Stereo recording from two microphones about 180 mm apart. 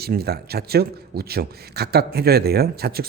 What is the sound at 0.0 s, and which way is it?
A man's voice, 60° right (ahead or behind).